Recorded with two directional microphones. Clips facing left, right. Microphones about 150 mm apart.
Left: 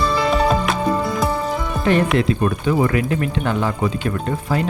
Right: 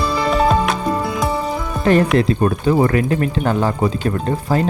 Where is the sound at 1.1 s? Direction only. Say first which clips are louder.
Even; centre (ahead or behind).